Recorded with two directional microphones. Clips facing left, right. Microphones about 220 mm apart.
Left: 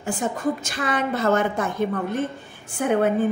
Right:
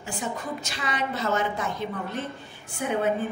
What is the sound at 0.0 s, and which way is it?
Music, 50° left (ahead or behind).